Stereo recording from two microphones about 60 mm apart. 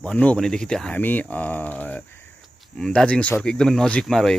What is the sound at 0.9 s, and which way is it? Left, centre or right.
Speech, left.